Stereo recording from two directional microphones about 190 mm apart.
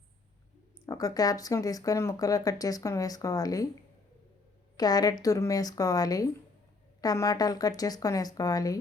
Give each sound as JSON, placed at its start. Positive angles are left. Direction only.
{"t": 0.9, "sound": "speech", "side_deg": 20}
{"t": 4.8, "sound": "speech", "side_deg": 20}